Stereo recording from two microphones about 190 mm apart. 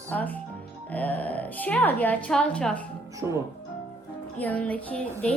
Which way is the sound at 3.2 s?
10° right (ahead or behind).